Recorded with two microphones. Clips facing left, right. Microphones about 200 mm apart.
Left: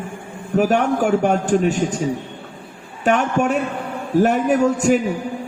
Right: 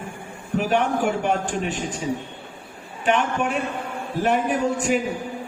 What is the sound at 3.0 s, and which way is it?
A man's voice, 45° left (ahead or behind).